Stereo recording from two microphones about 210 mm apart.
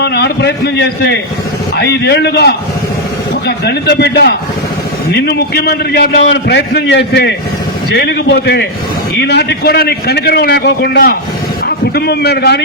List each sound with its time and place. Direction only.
0.0 s a man's voice: 50° left (ahead or behind)